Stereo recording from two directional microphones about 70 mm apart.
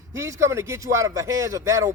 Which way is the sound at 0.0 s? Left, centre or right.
Right.